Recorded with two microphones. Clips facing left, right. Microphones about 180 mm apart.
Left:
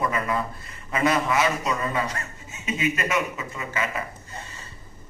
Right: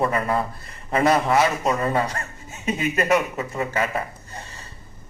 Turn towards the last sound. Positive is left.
turn(degrees=-40)  # may be behind; listen again after turning